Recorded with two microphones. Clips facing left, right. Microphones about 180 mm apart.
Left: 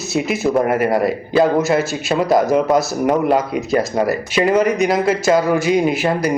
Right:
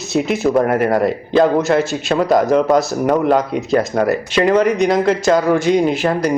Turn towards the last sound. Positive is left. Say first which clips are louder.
# right 1 dB
turn(degrees=5)  # may be behind; listen again after turning